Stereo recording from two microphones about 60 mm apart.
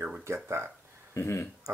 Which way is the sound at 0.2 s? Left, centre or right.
Right.